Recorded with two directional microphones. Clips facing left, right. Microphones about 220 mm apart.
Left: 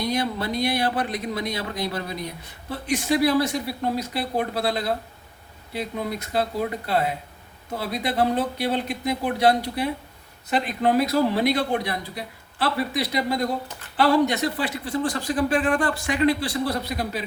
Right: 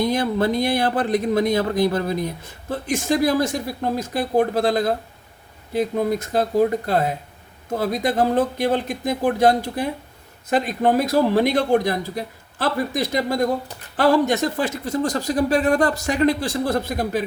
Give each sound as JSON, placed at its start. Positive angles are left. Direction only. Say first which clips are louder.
{"t": 0.0, "sound": "speech", "louder": "right 6 dB", "side_deg": -50}